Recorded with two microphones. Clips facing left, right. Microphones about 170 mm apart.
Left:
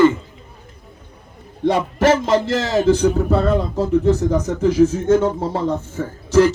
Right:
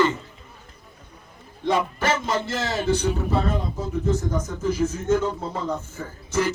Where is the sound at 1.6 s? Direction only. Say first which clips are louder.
Left 7 dB; 80° left.